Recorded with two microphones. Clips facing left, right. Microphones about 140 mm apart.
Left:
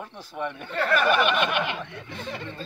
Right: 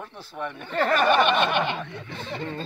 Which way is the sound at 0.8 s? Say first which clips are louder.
Right 2 dB; 30° right (ahead or behind).